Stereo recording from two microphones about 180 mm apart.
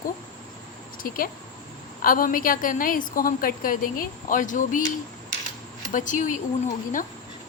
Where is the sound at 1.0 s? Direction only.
50° left (ahead or behind).